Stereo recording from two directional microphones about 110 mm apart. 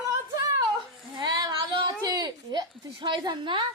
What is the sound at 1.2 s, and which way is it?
Female singing, 40° right (ahead or behind).